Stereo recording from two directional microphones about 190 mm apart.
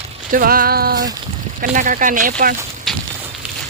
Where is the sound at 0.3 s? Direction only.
50° right (ahead or behind).